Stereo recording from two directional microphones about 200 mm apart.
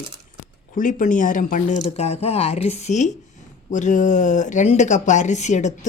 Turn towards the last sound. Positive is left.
turn(degrees=35)  # may be behind; listen again after turning